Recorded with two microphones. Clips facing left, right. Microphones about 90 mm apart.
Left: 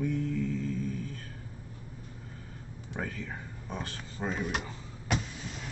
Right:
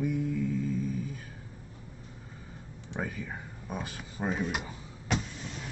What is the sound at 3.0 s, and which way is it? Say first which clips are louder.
Speech: right 1 dB; 10° right (ahead or behind).